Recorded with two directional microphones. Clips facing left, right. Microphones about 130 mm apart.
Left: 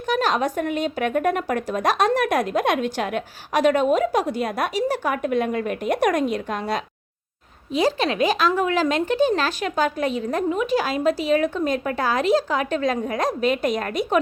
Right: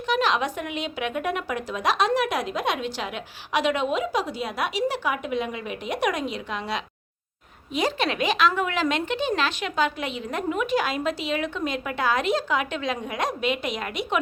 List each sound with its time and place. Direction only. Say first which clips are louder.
0.1 s speech: left 2 dB; 45° left (ahead or behind)
7.7 s speech: left 4 dB; 35° left (ahead or behind)